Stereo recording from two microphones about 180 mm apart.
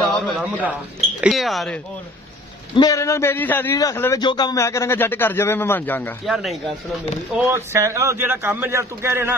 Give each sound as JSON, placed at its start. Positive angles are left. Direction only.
{"t": 0.4, "sound": "a man's voice", "side_deg": -10}
{"t": 2.7, "sound": "speech", "side_deg": 20}
{"t": 6.2, "sound": "speech", "side_deg": 0}
{"t": 7.3, "sound": "a man's voice", "side_deg": -15}